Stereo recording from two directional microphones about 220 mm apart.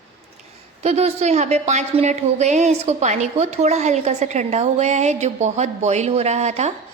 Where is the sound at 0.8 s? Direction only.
30° right (ahead or behind).